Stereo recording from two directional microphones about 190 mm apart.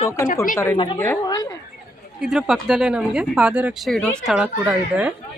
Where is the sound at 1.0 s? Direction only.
15° left (ahead or behind).